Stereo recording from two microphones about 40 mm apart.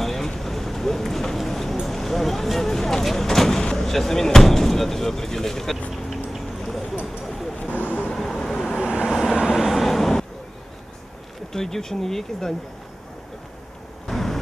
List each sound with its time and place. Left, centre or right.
0.0 s vehicle: centre
3.7 s speech: centre
5.9 s a sound: centre
7.7 s vehicle: left
8.2 s vehicle: centre
8.7 s vehicle: right
9.1 s vehicle: centre
11.5 s speech: centre
14.0 s vehicle: centre